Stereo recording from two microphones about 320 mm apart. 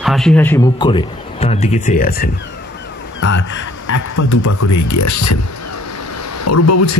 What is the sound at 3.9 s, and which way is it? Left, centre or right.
Speech, left.